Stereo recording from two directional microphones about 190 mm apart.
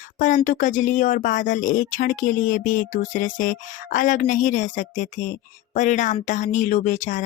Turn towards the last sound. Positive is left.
turn(degrees=40)  # may be behind; listen again after turning